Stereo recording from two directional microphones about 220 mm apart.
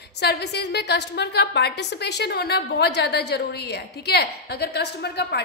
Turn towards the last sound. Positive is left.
turn(degrees=50)  # may be behind; listen again after turning